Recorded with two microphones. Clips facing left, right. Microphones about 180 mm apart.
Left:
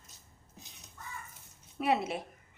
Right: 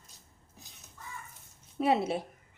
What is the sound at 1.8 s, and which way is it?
Speech, 30° right (ahead or behind).